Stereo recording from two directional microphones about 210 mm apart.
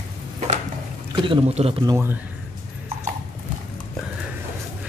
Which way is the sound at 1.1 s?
25° right (ahead or behind).